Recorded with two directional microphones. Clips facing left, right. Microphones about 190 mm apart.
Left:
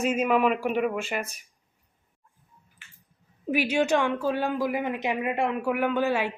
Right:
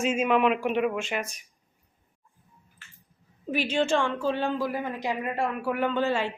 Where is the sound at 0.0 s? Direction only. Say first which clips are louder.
Even; centre (ahead or behind).